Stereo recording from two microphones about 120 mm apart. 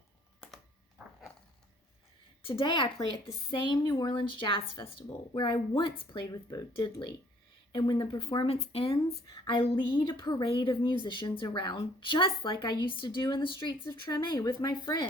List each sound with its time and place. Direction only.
2.4 s a woman's voice: 45° left (ahead or behind)
10.4 s a woman's voice: 45° left (ahead or behind)